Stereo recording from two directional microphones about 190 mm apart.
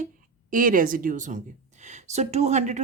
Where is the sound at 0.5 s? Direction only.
45° right (ahead or behind).